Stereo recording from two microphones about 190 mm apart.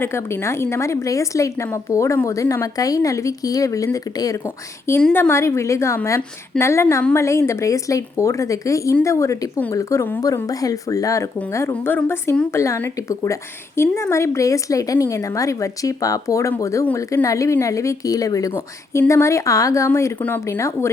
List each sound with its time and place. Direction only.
0.0 s speech: 15° left (ahead or behind)